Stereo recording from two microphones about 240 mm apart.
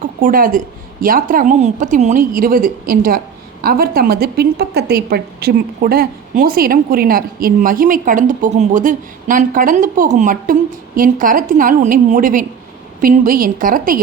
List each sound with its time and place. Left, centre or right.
0.0 s a woman's voice: right